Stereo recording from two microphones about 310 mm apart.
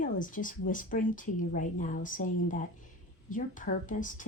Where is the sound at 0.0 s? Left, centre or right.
Left.